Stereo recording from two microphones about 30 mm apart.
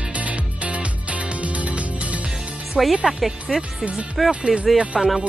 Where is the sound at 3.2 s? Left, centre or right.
Centre.